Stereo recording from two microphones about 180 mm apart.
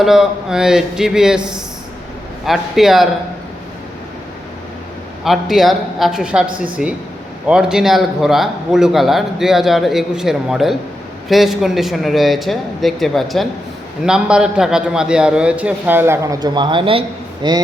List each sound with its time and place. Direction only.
0.0 s a man's voice: centre (ahead or behind)
5.2 s a man's voice: centre (ahead or behind); by 17.6 s 25° right (ahead or behind)